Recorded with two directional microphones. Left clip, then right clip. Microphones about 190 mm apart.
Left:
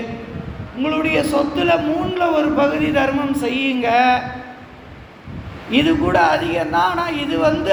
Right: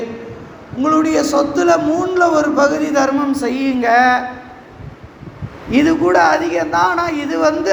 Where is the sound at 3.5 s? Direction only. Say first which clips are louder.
Right 1 dB; 90° right.